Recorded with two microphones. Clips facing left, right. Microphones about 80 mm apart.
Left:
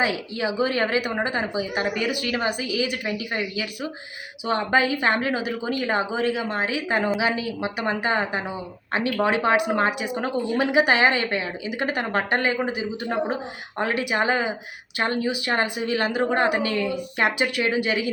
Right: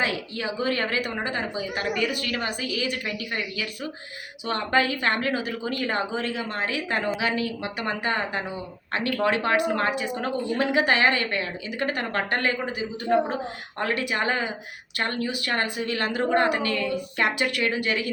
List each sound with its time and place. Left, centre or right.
0.0 s speech: centre